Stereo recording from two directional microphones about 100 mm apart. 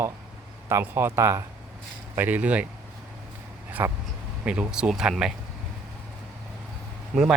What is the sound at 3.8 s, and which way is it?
Speech, 25° right (ahead or behind).